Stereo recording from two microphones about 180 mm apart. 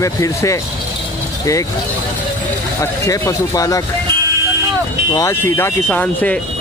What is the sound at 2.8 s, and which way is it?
Speech, 20° left (ahead or behind).